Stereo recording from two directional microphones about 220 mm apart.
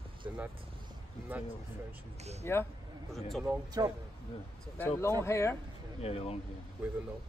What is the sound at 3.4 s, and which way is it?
Speech, 15° right (ahead or behind).